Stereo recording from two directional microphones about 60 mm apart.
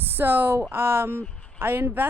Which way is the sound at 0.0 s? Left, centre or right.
Right.